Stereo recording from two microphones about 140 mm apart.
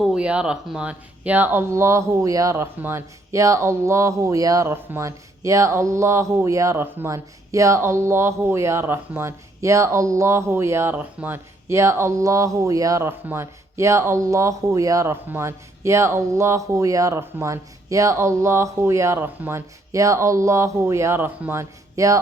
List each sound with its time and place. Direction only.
0.0 s speech: 5° right (ahead or behind); by 22.2 s 25° right (ahead or behind)